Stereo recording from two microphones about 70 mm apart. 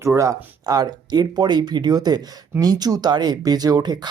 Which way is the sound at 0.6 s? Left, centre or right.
Right.